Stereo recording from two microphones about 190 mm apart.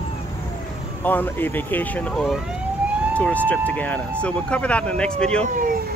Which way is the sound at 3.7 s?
10° left (ahead or behind).